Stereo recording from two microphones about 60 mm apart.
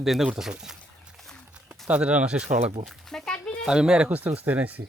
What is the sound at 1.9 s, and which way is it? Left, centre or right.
Speech, centre.